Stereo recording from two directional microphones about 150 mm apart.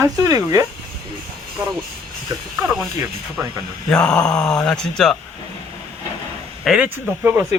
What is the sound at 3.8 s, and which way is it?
Speech, 5° left (ahead or behind).